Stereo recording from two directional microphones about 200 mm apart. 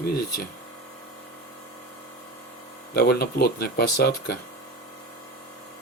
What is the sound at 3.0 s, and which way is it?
Speech, 55° left (ahead or behind).